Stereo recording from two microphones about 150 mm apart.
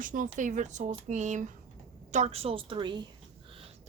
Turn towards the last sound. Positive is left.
turn(degrees=-30)  # may be behind; listen again after turning